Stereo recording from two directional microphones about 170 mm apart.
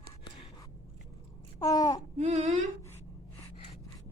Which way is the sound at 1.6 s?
20° left (ahead or behind).